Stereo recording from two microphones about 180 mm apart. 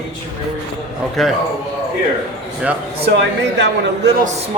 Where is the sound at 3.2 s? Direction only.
70° right (ahead or behind).